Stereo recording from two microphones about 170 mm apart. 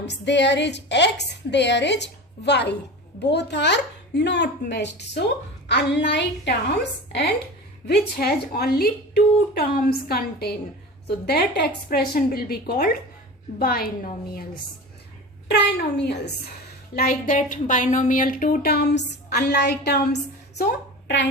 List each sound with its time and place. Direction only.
0.0 s a woman's voice: 90° left; by 14.1 s 60° left (ahead or behind)
15.4 s a woman's voice: 80° left
16.9 s a woman's voice: 60° left (ahead or behind); by 20.1 s 75° left (ahead or behind)